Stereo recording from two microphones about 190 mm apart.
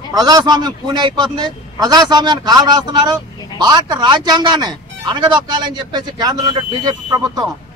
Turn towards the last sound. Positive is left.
turn(degrees=-20)  # may be behind; listen again after turning